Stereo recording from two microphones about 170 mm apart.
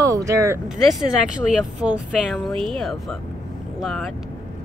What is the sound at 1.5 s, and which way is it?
Speech, 5° right (ahead or behind).